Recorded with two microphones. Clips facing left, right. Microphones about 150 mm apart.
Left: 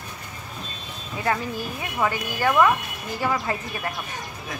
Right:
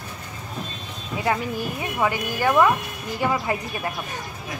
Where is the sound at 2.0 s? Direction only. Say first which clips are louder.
Right 1 dB; 15° right (ahead or behind).